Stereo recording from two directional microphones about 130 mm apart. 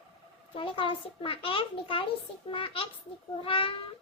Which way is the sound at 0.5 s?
40° left (ahead or behind).